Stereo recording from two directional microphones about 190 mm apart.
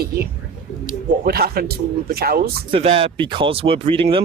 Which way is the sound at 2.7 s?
30° right (ahead or behind).